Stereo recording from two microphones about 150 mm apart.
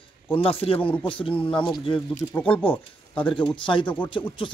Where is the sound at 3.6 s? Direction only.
35° left (ahead or behind).